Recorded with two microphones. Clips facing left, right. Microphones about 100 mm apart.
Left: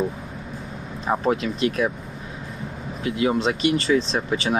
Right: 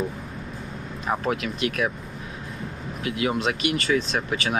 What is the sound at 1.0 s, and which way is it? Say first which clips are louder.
Speech: left 4 dB; 30° left (ahead or behind).